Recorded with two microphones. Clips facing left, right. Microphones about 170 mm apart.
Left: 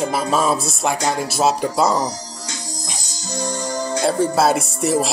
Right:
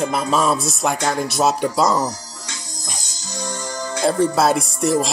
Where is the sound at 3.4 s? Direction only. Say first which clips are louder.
Left 3 dB; 35° left (ahead or behind).